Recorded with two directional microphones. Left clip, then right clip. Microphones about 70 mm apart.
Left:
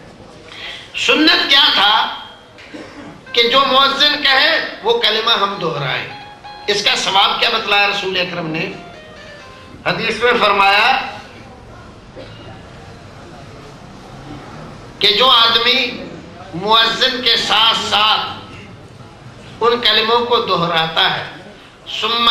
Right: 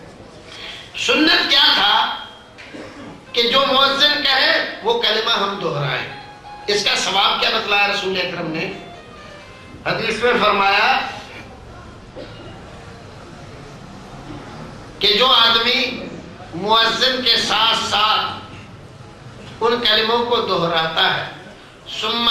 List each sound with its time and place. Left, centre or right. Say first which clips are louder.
0.9 s a man's voice: left 3 dB; left
3.3 s a man's voice: left 3 dB; left
9.8 s a man's voice: left 3 dB; left
14.9 s a man's voice: left 3 dB; left
19.5 s a man's voice: left 3 dB; left